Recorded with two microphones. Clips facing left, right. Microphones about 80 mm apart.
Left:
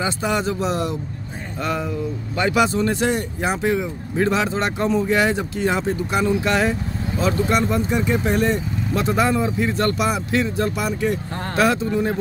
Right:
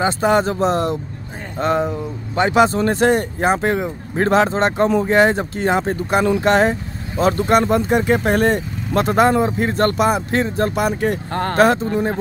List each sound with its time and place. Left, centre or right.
0.0 s speech: right
11.5 s speech: right